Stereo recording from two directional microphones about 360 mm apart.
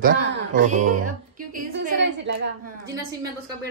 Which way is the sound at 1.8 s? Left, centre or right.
Right.